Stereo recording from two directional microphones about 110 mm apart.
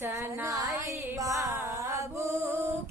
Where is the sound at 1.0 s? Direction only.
30° right (ahead or behind).